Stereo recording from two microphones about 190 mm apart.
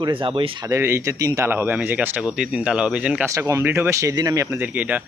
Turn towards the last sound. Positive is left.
turn(degrees=-10)  # may be behind; listen again after turning